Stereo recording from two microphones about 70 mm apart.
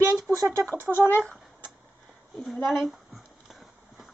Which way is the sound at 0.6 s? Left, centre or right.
Right.